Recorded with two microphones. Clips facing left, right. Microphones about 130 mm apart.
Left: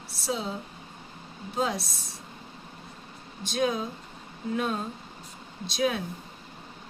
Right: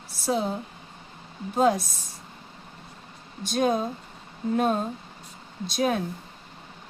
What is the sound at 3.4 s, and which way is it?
Speech, 45° right (ahead or behind).